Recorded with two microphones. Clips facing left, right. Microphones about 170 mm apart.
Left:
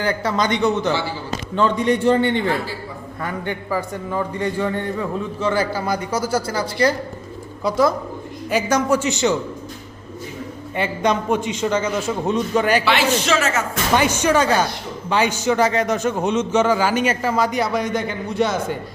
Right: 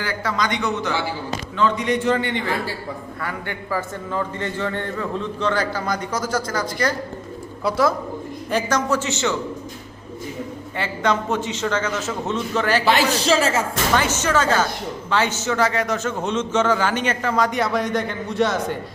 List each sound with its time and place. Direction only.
0.2 s a man's voice: 25° left (ahead or behind)
1.5 s a man's voice: 35° left (ahead or behind)
3.2 s a man's voice: 20° left (ahead or behind)
7.6 s speech: 5° right (ahead or behind)
8.4 s a man's voice: 10° left (ahead or behind)
10.8 s a man's voice: 15° left (ahead or behind)
12.8 s speech: 40° right (ahead or behind)
13.9 s a man's voice: 15° left (ahead or behind)